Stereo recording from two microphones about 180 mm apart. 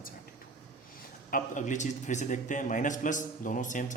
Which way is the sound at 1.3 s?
45° left (ahead or behind).